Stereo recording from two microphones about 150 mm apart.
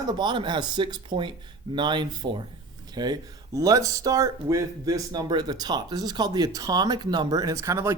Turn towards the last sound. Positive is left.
turn(degrees=-20)  # may be behind; listen again after turning